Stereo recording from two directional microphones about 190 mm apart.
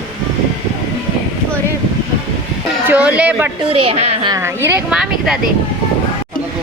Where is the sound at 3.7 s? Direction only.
30° right (ahead or behind).